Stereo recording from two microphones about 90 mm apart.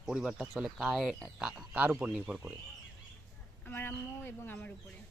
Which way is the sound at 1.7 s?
15° right (ahead or behind).